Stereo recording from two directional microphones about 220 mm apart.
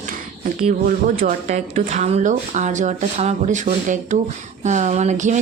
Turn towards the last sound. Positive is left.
turn(degrees=-35)  # may be behind; listen again after turning